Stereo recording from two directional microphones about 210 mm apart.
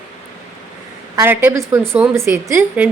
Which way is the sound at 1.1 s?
10° right (ahead or behind).